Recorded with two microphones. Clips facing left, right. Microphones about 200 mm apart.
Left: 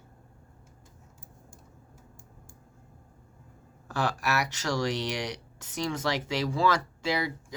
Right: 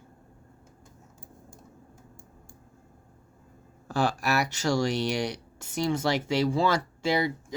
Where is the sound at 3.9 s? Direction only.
30° right (ahead or behind).